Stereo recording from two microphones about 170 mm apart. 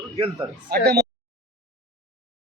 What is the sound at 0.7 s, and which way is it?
Speech, 70° right (ahead or behind).